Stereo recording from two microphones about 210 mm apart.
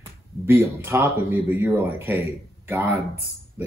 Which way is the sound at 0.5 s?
10° right (ahead or behind).